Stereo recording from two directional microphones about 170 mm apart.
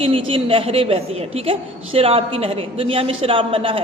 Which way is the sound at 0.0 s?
30° right (ahead or behind).